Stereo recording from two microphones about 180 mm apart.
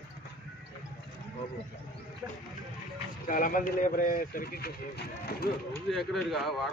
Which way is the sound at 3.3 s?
50° left (ahead or behind).